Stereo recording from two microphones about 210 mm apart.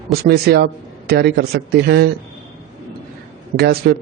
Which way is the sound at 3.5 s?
50° right (ahead or behind).